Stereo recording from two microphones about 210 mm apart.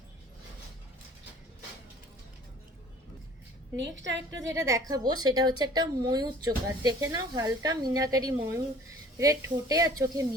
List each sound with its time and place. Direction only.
3.8 s a woman's voice: 60° right (ahead or behind)
4.6 s a woman's voice: 15° right (ahead or behind)